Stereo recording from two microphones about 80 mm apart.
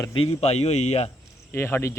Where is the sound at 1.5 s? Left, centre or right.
Left.